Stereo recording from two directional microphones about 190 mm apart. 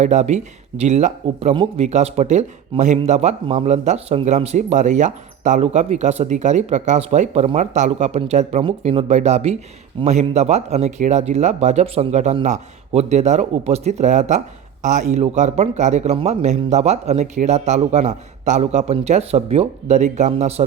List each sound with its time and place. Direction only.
0.0 s speech: 40° right (ahead or behind)